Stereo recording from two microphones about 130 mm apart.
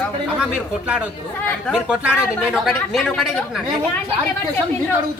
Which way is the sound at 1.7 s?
5° right (ahead or behind).